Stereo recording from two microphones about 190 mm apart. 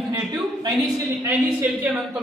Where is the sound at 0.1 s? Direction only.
20° right (ahead or behind).